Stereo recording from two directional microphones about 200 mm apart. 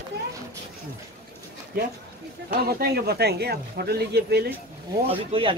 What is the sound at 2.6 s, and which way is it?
Speech, 50° right (ahead or behind).